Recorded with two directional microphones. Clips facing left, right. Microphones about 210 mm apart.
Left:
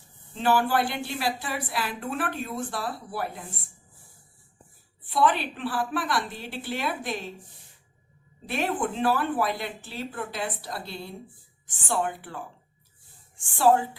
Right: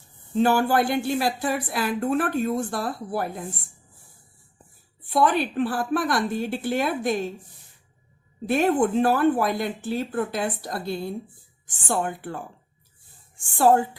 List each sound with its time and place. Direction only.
0.3 s a woman's voice: 45° right (ahead or behind)
5.1 s a woman's voice: 45° right (ahead or behind)
8.4 s a woman's voice: 45° right (ahead or behind)